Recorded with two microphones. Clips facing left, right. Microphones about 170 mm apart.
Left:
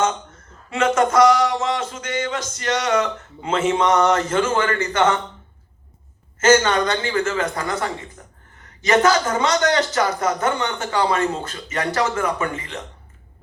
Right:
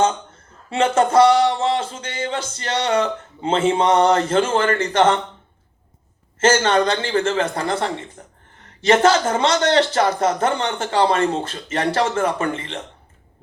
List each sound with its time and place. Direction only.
0.0 s speech: 30° right (ahead or behind)
6.4 s a man's voice: 30° right (ahead or behind)